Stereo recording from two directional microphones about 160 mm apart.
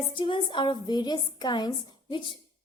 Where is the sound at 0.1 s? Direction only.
30° left (ahead or behind).